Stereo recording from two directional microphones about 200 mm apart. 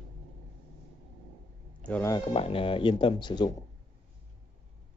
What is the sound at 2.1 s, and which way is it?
Speech, 25° left (ahead or behind).